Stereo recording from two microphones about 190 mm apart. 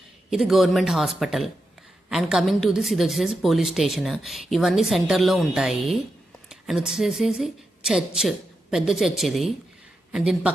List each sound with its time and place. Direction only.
0.3 s a woman's voice: centre (ahead or behind)